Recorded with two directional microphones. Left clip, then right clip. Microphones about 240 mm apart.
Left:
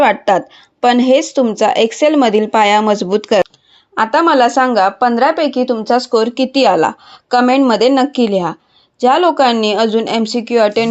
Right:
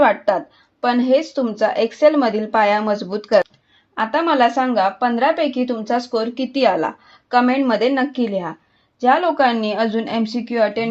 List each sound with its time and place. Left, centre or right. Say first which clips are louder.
0.0 s a woman's voice: left 4 dB; left